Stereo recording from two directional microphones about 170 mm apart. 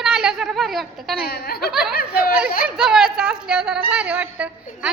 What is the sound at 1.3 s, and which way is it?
Speech, 65° left (ahead or behind).